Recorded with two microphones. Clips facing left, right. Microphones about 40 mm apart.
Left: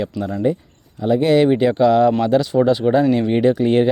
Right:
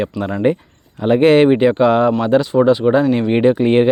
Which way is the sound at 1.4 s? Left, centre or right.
Right.